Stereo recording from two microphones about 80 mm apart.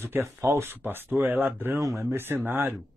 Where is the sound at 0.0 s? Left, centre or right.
Right.